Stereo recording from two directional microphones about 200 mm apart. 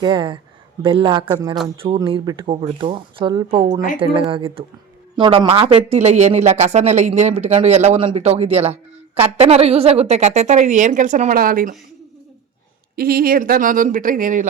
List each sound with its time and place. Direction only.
0.0 s speech: 25° right (ahead or behind); by 11.7 s 45° right (ahead or behind)
13.0 s speech: 50° right (ahead or behind)